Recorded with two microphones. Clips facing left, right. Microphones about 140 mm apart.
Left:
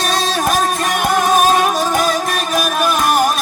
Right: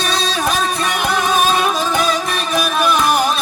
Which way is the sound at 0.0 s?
45° left (ahead or behind).